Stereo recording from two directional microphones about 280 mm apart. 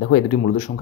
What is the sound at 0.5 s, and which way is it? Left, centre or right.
Speech, left.